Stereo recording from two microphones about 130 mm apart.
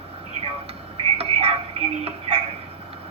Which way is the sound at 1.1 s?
50° right (ahead or behind).